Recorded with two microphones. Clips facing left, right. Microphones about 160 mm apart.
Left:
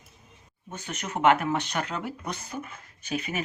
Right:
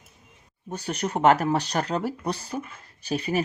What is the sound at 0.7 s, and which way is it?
Speech, 35° right (ahead or behind).